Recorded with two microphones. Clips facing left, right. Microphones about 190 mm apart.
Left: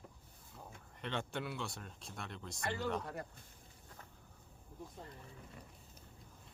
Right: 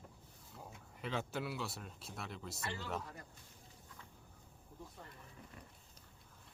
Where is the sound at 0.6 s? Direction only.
Centre (ahead or behind).